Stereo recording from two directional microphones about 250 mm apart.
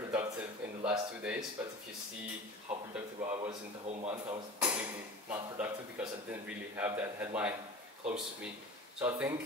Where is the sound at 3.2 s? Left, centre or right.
Centre.